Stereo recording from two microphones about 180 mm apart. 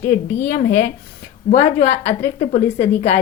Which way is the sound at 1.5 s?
40° left (ahead or behind).